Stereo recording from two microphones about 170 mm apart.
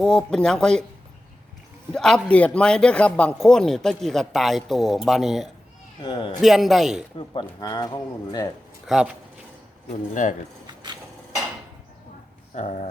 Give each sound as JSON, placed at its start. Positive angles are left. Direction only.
{"t": 0.0, "sound": "a man's voice", "side_deg": 5}
{"t": 1.9, "sound": "a man's voice", "side_deg": 5}
{"t": 6.0, "sound": "speech", "side_deg": 30}
{"t": 6.4, "sound": "a man's voice", "side_deg": 0}
{"t": 7.2, "sound": "speech", "side_deg": 25}
{"t": 8.9, "sound": "a man's voice", "side_deg": -5}
{"t": 10.2, "sound": "speech", "side_deg": 50}
{"t": 12.5, "sound": "speech", "side_deg": 45}